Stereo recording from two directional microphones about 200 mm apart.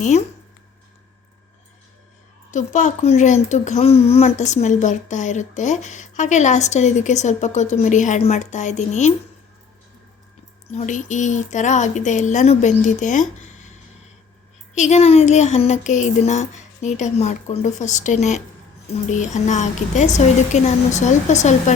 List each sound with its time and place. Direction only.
0.0 s speech: 35° left (ahead or behind)
2.5 s speech: 40° left (ahead or behind)
10.7 s speech: 35° left (ahead or behind)
14.8 s speech: 35° left (ahead or behind)